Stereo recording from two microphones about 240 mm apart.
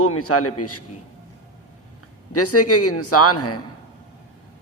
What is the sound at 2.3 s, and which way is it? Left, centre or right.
A man's voice, left.